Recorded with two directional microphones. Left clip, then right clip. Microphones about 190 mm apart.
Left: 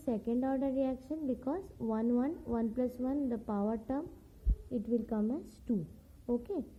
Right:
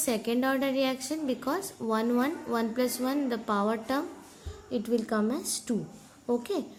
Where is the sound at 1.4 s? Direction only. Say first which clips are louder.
Right 7 dB; 10° left (ahead or behind).